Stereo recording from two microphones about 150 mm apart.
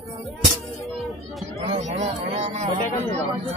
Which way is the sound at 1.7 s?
45° right (ahead or behind).